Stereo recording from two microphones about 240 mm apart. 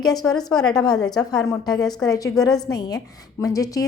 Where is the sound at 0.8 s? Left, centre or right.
Centre.